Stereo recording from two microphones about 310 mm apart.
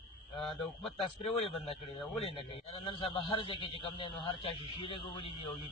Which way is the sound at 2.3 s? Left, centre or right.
Centre.